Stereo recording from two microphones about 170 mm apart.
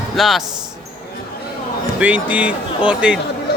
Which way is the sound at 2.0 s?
10° right (ahead or behind).